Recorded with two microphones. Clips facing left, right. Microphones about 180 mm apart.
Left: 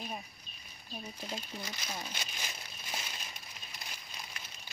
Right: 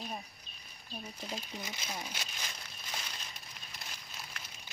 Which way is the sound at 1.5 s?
15° right (ahead or behind).